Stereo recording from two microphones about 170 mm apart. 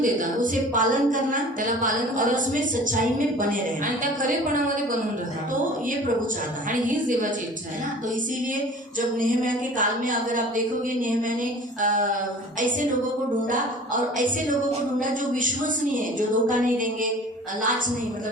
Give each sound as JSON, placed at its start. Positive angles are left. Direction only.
{"t": 0.0, "sound": "a woman's voice", "side_deg": -50}
{"t": 9.0, "sound": "a woman's voice", "side_deg": -50}
{"t": 13.5, "sound": "a woman's voice", "side_deg": -50}
{"t": 16.0, "sound": "a woman's voice", "side_deg": -50}